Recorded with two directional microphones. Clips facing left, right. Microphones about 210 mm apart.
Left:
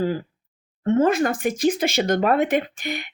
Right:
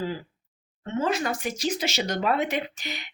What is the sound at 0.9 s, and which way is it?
Speech, 55° left (ahead or behind).